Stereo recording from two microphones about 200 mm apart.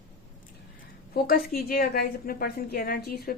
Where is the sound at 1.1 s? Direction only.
45° left (ahead or behind).